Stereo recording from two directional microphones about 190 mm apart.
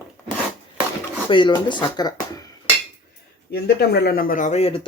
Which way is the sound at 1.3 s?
25° left (ahead or behind).